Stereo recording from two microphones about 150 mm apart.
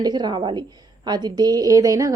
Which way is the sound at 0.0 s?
30° right (ahead or behind).